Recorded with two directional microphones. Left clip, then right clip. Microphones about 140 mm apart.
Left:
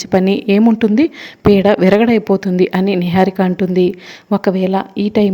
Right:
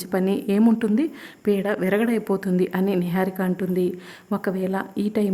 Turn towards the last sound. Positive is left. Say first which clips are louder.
# left 10 dB
turn(degrees=25)  # may be behind; listen again after turning